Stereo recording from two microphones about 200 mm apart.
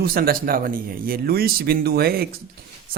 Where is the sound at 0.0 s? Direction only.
50° right (ahead or behind).